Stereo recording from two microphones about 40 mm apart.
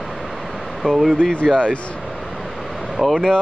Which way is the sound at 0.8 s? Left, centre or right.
Left.